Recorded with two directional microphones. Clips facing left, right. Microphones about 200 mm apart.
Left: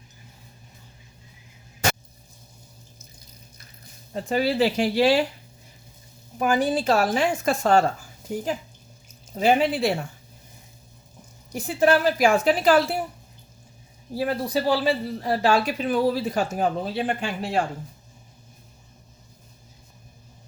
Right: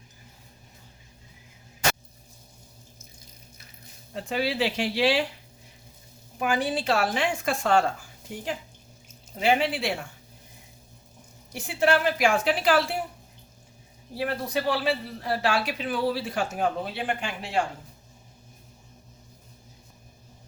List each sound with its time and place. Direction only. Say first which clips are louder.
4.1 s speech: left 5 dB; 40° left (ahead or behind)
6.4 s speech: left 4 dB; 40° left (ahead or behind)
11.5 s speech: left 4 dB; 40° left (ahead or behind)
14.2 s speech: left 4 dB; 35° left (ahead or behind)